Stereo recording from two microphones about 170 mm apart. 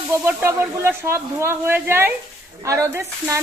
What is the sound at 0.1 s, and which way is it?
Speech, 15° right (ahead or behind).